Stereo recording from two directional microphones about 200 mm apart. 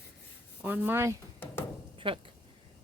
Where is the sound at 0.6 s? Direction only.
10° right (ahead or behind).